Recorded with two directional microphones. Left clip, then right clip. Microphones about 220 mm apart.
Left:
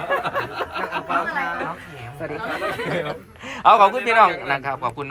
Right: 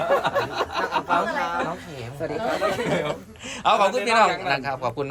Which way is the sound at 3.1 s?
Centre (ahead or behind).